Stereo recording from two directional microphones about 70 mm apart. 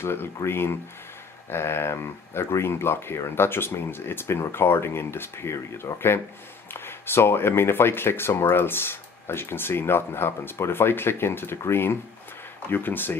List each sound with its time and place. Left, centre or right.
0.0 s speech: left